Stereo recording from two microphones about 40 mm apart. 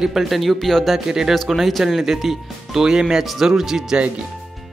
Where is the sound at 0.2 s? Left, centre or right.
Centre.